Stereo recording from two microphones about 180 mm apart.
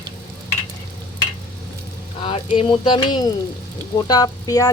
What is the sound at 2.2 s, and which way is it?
Sizzle, 30° left (ahead or behind).